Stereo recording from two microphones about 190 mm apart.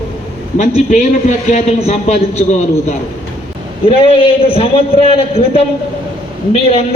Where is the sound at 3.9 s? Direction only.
30° left (ahead or behind).